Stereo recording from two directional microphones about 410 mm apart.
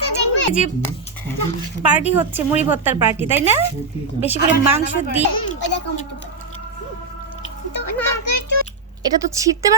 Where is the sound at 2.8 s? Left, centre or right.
Centre.